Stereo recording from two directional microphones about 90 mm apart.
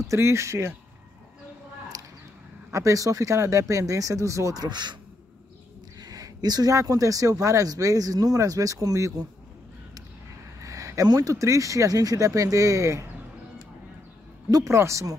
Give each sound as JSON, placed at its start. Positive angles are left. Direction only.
{"t": 0.0, "sound": "speech", "side_deg": -35}
{"t": 1.9, "sound": "a sound", "side_deg": -40}
{"t": 2.7, "sound": "speech", "side_deg": -35}
{"t": 4.6, "sound": "speech", "side_deg": -55}
{"t": 5.9, "sound": "speech", "side_deg": -45}
{"t": 10.6, "sound": "speech", "side_deg": -35}
{"t": 14.7, "sound": "speech", "side_deg": -30}